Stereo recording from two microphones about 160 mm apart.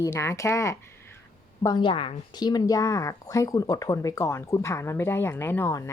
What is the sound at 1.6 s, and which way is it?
Speech, 30° left (ahead or behind).